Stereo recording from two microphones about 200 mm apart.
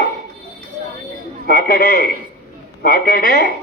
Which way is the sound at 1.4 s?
45° left (ahead or behind).